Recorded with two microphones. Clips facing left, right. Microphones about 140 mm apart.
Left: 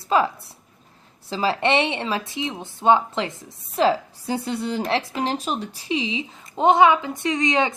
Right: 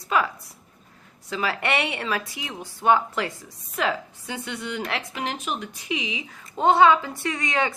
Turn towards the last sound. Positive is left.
turn(degrees=20)  # may be behind; listen again after turning